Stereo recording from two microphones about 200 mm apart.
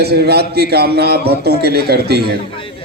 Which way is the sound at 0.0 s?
55° right (ahead or behind).